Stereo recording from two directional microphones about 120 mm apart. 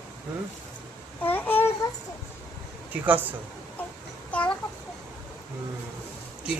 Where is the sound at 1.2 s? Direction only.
15° left (ahead or behind).